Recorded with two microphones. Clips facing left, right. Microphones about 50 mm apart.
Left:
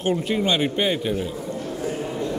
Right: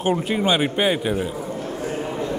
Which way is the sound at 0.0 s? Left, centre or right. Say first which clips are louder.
Right 1 dB; centre.